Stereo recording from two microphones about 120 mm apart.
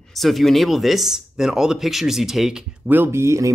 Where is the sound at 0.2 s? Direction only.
Centre (ahead or behind).